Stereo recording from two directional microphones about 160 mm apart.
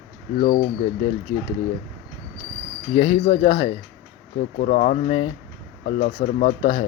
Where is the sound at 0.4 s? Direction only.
50° left (ahead or behind).